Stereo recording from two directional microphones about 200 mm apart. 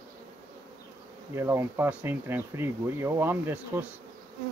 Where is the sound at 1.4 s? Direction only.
10° right (ahead or behind).